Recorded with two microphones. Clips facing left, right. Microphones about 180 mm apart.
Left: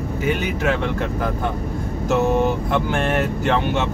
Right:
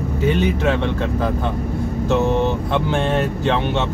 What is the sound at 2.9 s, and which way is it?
Speech, 20° right (ahead or behind).